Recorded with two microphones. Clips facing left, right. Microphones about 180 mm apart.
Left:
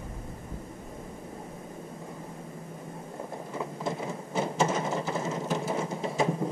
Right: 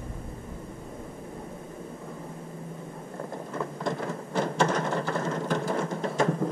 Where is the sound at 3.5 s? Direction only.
5° left (ahead or behind).